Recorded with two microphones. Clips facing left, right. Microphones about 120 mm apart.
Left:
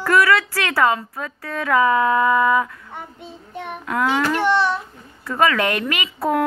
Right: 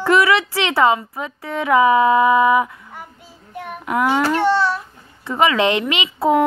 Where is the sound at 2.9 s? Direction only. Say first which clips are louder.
Left 3 dB; 25° left (ahead or behind).